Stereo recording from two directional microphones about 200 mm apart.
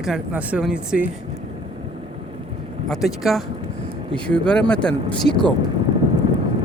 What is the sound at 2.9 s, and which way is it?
Speech, centre (ahead or behind).